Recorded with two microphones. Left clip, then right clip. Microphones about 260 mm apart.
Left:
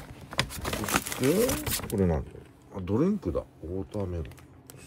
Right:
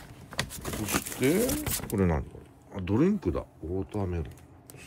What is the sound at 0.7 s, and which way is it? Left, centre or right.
Crumpling, left.